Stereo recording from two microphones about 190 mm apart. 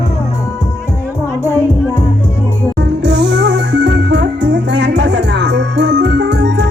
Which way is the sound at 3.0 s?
65° right (ahead or behind).